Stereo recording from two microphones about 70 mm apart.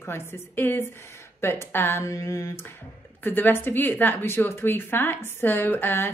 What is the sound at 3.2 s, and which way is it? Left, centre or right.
Speech, left.